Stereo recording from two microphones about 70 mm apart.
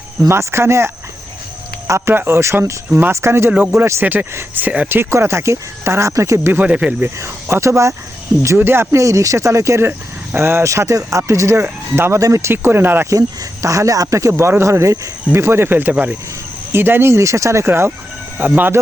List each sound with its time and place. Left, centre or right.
0.3 s speech: right
2.1 s speech: right
4.0 s speech: right
5.1 s speech: right
6.6 s speech: centre
7.2 s speech: right
8.4 s speech: right
10.7 s speech: right
11.6 s speech: right
12.2 s speech: right
13.1 s speech: right
18.3 s speech: right